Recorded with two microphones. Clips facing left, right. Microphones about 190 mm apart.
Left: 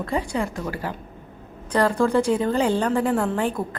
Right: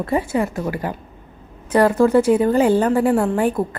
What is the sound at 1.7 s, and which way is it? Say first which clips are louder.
A woman's voice: right 5 dB; 10° right (ahead or behind).